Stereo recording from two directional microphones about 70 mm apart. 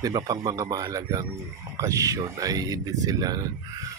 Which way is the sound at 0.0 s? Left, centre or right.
Right.